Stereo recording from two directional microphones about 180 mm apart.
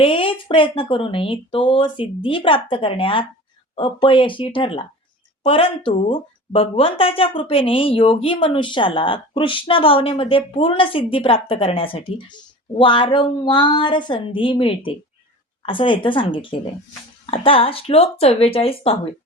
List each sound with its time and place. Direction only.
0.0 s speech: 30° left (ahead or behind)